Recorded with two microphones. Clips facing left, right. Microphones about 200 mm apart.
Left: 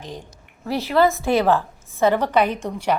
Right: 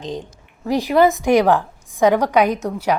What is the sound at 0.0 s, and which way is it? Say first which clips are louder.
A woman's voice: right 7 dB; 20° right (ahead or behind).